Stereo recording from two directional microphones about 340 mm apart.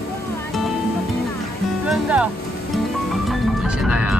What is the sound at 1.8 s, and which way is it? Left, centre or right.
Music, centre.